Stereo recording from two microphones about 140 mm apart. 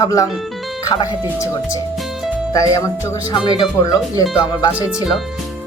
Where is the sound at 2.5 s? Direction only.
25° left (ahead or behind).